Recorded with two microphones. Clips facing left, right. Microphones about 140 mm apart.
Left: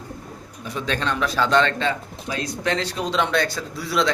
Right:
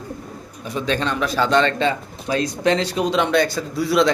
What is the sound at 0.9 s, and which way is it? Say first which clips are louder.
Speech: right 2 dB; 5° right (ahead or behind).